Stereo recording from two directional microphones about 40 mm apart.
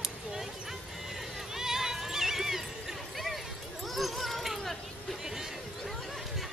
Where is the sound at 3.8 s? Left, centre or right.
Centre.